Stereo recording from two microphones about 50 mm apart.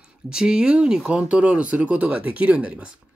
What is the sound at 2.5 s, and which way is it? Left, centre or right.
Speech, centre.